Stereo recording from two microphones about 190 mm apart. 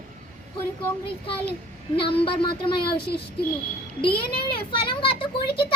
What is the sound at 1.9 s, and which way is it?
Speech, 30° left (ahead or behind).